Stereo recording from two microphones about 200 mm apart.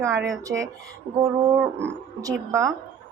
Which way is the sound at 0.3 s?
15° right (ahead or behind).